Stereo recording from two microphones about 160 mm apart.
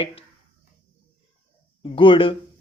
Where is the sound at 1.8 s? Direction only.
35° left (ahead or behind).